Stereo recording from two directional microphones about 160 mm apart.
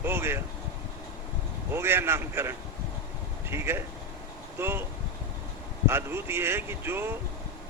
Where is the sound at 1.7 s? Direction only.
15° right (ahead or behind).